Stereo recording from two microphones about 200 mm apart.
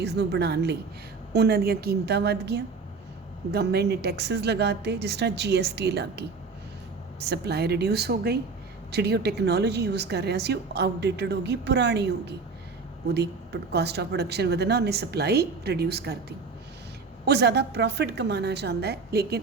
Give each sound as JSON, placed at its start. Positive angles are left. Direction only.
{"t": 0.0, "sound": "a woman's voice", "side_deg": -55}
{"t": 17.2, "sound": "a woman's voice", "side_deg": -55}